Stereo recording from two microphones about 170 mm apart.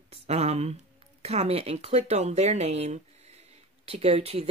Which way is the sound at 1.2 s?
40° right (ahead or behind).